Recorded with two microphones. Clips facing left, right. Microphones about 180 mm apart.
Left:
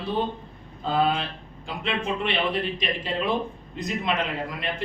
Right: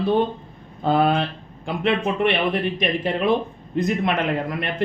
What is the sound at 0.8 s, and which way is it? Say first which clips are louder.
A man's voice: right 5 dB; 60° right (ahead or behind).